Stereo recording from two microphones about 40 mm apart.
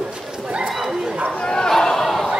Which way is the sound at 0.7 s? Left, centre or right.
Centre.